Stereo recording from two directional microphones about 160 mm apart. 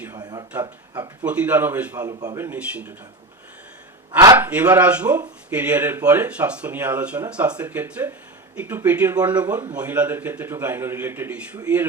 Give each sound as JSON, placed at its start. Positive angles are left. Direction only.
{"t": 0.1, "sound": "speech", "side_deg": -25}
{"t": 1.2, "sound": "speech", "side_deg": -10}
{"t": 2.0, "sound": "speech", "side_deg": -20}
{"t": 4.4, "sound": "speech", "side_deg": -10}